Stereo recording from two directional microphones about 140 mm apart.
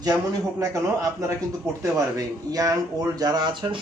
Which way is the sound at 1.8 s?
25° right (ahead or behind).